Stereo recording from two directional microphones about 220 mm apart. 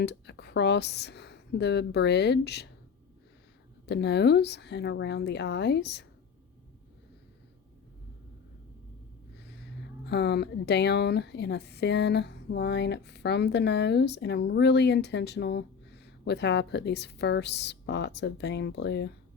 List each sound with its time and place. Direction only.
0.0 s speech: 50° left (ahead or behind)
3.8 s a woman's voice: 50° left (ahead or behind)
10.1 s a woman's voice: 50° left (ahead or behind)